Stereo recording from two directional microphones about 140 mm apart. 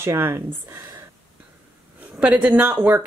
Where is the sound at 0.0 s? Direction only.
20° right (ahead or behind).